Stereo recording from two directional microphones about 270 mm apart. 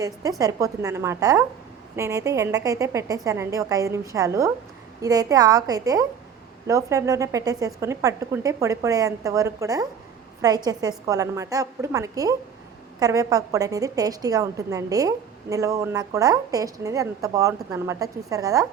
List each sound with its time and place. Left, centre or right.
0.0 s a woman's voice: centre